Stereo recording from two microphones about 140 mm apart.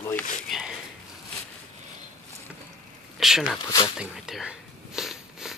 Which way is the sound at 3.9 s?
5° right (ahead or behind).